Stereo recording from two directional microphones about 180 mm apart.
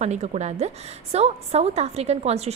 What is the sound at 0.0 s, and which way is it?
A woman's voice, 40° right (ahead or behind).